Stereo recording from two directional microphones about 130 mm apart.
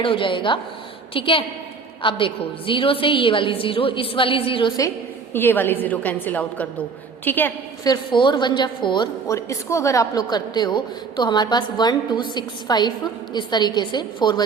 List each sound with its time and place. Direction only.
0.0 s a woman's voice: 40° left (ahead or behind)
5.3 s a woman's voice: 15° left (ahead or behind)
7.9 s a woman's voice: 35° left (ahead or behind)
9.2 s a woman's voice: 25° left (ahead or behind)